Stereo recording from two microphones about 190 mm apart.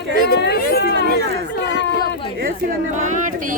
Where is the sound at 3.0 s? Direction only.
40° right (ahead or behind).